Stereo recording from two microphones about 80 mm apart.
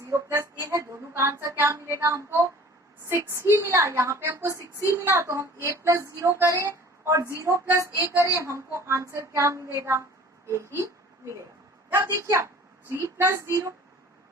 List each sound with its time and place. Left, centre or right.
0.0 s music: right
0.7 s a sound: right
2.0 s a woman's voice: right
7.3 s a sound: right
7.8 s speech: right
11.9 s speech: right